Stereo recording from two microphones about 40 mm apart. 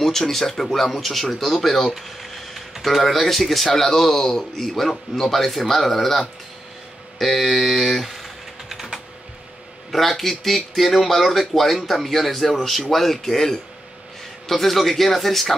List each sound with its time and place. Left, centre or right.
0.0 s speech: centre
7.2 s typing: centre
9.8 s speech: centre